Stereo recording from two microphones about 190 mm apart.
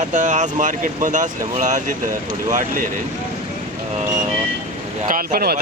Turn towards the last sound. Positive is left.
turn(degrees=-55)  # may be behind; listen again after turning